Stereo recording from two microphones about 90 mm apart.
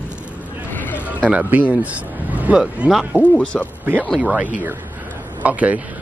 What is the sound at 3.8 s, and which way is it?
Speech, 20° right (ahead or behind).